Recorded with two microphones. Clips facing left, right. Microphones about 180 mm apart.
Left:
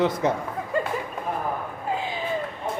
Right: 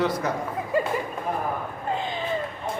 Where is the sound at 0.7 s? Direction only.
5° right (ahead or behind).